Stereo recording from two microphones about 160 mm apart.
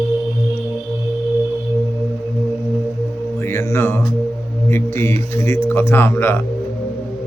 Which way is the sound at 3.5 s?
20° left (ahead or behind).